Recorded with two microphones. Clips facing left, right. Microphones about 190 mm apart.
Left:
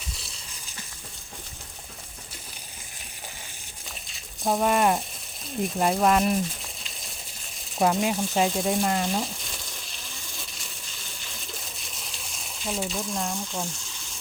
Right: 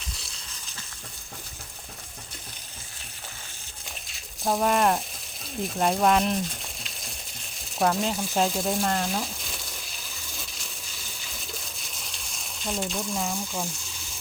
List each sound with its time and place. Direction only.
4.1 s speech: centre (ahead or behind)
7.8 s frying: 5° left (ahead or behind)
11.8 s a sound: centre (ahead or behind)